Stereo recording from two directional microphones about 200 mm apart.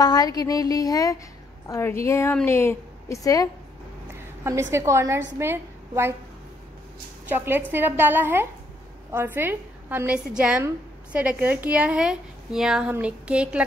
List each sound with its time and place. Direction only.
0.0 s a woman's voice: 20° left (ahead or behind)
4.1 s a woman's voice: 15° right (ahead or behind)
7.2 s a woman's voice: 10° right (ahead or behind)